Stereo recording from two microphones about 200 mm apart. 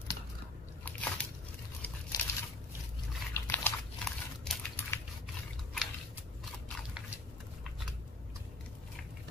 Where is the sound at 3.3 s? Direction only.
10° left (ahead or behind).